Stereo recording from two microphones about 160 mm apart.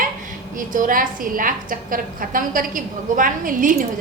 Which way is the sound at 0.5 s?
55° right (ahead or behind).